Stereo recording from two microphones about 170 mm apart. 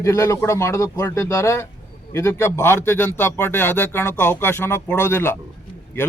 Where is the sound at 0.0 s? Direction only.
15° left (ahead or behind).